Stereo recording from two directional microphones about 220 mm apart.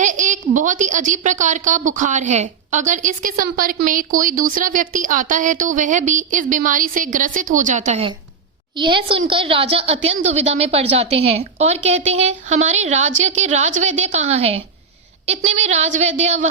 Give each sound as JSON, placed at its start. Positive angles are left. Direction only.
{"t": 0.0, "sound": "a woman's voice", "side_deg": -35}